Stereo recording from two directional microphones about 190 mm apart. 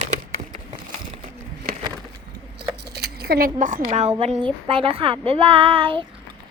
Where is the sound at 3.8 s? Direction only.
35° right (ahead or behind).